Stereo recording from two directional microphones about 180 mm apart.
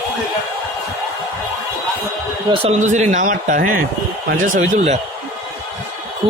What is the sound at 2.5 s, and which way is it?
A man's voice, 35° right (ahead or behind).